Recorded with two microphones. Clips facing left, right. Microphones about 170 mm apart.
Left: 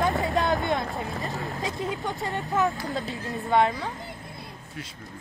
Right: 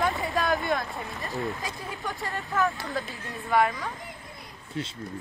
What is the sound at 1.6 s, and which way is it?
A woman's voice, 20° left (ahead or behind).